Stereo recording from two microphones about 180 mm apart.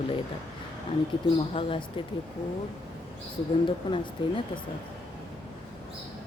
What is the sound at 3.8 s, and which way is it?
Speech, 25° left (ahead or behind).